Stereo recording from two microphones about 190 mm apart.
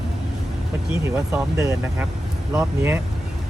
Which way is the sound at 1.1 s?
10° right (ahead or behind).